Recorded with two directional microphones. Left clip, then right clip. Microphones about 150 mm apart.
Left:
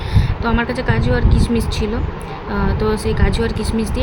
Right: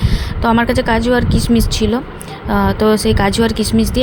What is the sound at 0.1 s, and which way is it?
Speech, 45° right (ahead or behind).